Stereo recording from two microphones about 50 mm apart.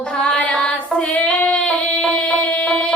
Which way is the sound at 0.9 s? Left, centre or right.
Left.